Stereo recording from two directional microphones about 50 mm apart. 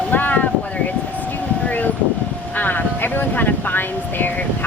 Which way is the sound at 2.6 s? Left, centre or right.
Left.